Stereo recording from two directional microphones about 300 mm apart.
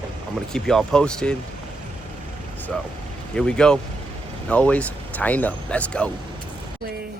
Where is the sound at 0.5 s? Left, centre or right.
Centre.